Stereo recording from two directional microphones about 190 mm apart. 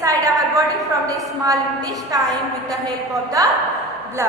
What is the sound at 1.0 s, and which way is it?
A woman's voice, 15° right (ahead or behind).